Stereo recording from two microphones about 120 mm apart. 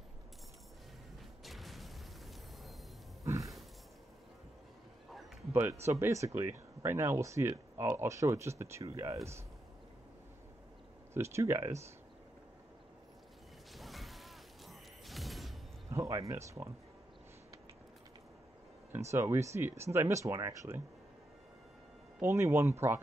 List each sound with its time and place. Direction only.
1.4 s a sound: centre (ahead or behind)
5.5 s speech: 20° right (ahead or behind)
11.1 s speech: 20° right (ahead or behind)
13.7 s a sound: centre (ahead or behind)
15.9 s speech: 25° right (ahead or behind)
18.9 s speech: 20° right (ahead or behind)
22.2 s speech: 20° right (ahead or behind)